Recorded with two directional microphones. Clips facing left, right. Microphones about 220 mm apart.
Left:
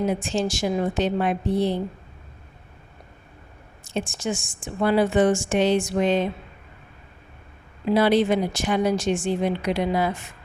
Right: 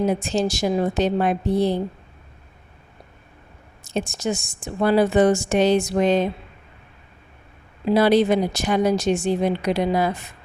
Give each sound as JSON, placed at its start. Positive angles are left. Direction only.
{"t": 0.1, "sound": "a woman's voice", "side_deg": -40}
{"t": 3.8, "sound": "a woman's voice", "side_deg": -40}
{"t": 7.9, "sound": "a woman's voice", "side_deg": -40}